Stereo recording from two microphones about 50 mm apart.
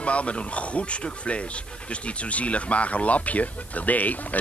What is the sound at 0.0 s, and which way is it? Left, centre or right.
Speech, left.